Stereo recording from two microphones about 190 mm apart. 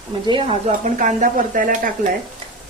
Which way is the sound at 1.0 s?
45° right (ahead or behind).